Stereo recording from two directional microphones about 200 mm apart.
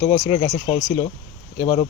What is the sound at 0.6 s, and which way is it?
Speech, 30° left (ahead or behind).